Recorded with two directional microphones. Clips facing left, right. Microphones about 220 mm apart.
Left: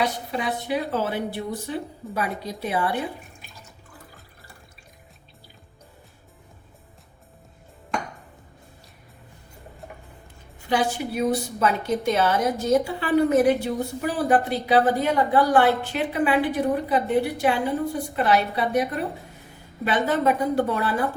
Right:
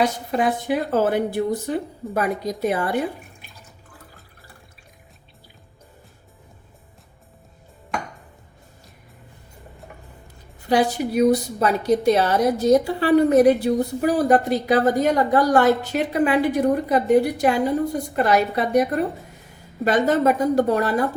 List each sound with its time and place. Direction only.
0.0 s a woman's voice: 50° right (ahead or behind)
10.7 s a woman's voice: 40° right (ahead or behind)
19.8 s a woman's voice: 45° right (ahead or behind)